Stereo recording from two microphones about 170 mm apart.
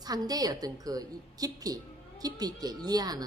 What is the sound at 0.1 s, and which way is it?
Speech, 20° right (ahead or behind).